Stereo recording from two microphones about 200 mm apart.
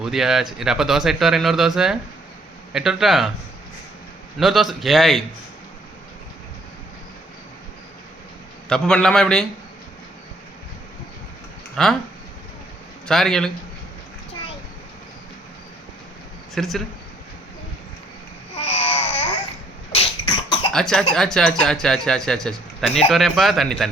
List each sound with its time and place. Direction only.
0.0 s a man's voice: centre (ahead or behind)
4.4 s a man's voice: centre (ahead or behind)
8.7 s a man's voice: 5° left (ahead or behind)
11.8 s a man's voice: 5° left (ahead or behind)
13.1 s a man's voice: centre (ahead or behind)
16.6 s a man's voice: centre (ahead or behind)
18.5 s babbling: 30° left (ahead or behind)
20.0 s cough: 25° left (ahead or behind)
20.7 s a man's voice: 5° left (ahead or behind)